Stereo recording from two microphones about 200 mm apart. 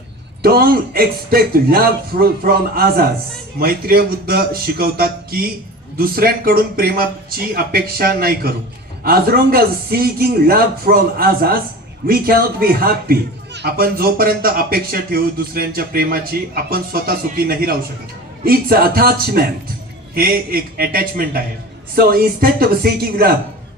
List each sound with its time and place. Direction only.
0.4 s a man's voice: 50° right (ahead or behind)